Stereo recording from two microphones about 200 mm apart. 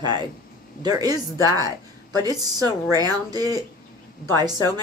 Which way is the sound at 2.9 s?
20° right (ahead or behind).